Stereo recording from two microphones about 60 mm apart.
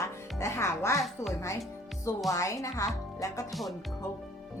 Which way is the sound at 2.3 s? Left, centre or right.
Left.